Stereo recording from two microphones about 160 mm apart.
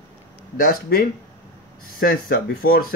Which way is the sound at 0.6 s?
65° left (ahead or behind).